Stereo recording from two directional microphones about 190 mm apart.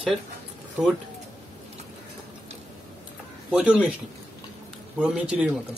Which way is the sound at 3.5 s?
5° right (ahead or behind).